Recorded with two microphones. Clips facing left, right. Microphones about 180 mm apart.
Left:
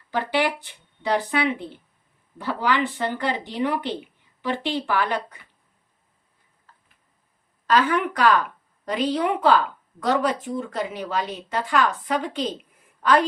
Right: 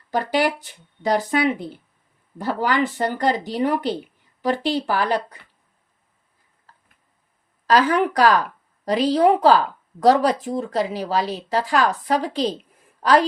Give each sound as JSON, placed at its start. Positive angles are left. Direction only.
{"t": 0.1, "sound": "a woman's voice", "side_deg": -40}
{"t": 7.7, "sound": "a woman's voice", "side_deg": -40}